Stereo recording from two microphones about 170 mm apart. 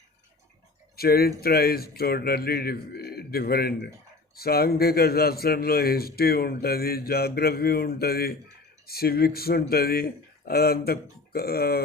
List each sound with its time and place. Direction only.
0.9 s speech: 65° left (ahead or behind)